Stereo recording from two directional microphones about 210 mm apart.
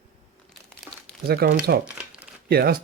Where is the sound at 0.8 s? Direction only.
Centre (ahead or behind).